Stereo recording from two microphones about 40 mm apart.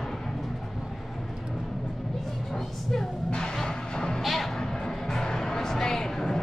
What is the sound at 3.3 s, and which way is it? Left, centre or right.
Music, centre.